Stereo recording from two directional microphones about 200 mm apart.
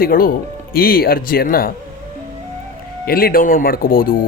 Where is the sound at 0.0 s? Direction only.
45° left (ahead or behind).